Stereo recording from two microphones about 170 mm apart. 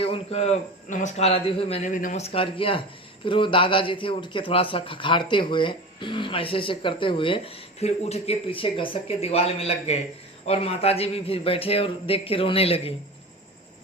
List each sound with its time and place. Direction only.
0.0 s a man's voice: 35° left (ahead or behind); by 2.2 s 50° left (ahead or behind)
2.2 s a man's voice: 35° left (ahead or behind)